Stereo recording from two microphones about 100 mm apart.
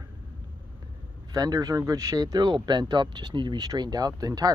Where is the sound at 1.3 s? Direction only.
40° right (ahead or behind).